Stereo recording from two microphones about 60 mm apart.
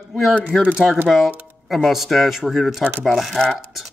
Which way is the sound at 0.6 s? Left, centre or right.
Right.